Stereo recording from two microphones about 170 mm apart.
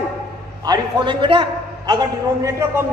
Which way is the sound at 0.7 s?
30° right (ahead or behind).